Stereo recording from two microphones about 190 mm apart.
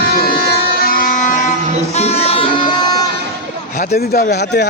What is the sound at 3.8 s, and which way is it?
Speech, 55° left (ahead or behind).